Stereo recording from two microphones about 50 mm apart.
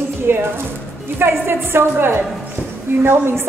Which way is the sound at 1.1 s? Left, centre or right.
Right.